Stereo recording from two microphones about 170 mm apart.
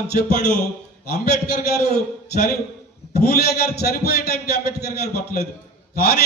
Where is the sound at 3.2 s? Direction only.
70° left (ahead or behind).